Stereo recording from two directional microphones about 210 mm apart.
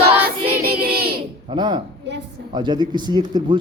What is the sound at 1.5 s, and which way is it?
Speech, 20° right (ahead or behind).